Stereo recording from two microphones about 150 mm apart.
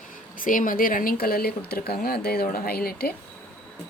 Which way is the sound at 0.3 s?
65° left (ahead or behind).